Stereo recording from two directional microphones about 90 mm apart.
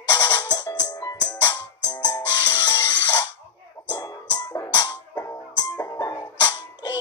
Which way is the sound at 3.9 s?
45° left (ahead or behind).